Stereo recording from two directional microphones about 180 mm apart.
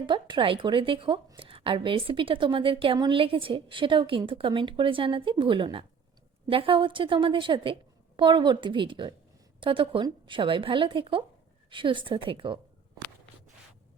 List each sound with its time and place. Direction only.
0.0 s a woman's voice: 25° right (ahead or behind)